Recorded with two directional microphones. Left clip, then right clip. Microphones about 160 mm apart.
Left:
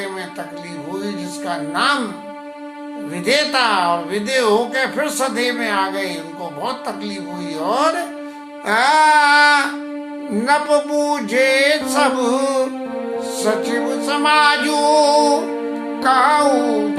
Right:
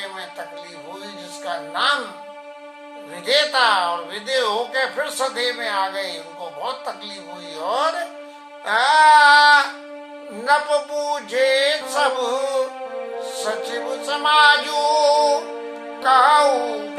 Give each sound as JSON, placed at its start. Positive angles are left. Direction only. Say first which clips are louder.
{"t": 1.5, "sound": "music", "louder": "left 3 dB", "side_deg": 20}
{"t": 3.2, "sound": "music", "louder": "left 1 dB", "side_deg": 20}
{"t": 7.6, "sound": "music", "louder": "left 4 dB", "side_deg": 20}